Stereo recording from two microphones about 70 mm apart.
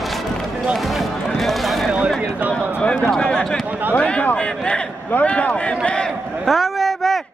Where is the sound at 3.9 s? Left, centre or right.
Centre.